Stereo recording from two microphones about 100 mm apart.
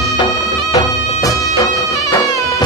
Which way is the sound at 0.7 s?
35° left (ahead or behind).